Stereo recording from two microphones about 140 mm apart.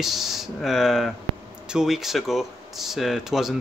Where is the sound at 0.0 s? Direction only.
Centre (ahead or behind).